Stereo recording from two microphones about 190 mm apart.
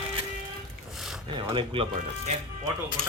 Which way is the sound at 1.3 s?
25° right (ahead or behind).